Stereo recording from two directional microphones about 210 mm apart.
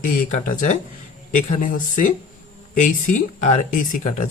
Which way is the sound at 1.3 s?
40° left (ahead or behind).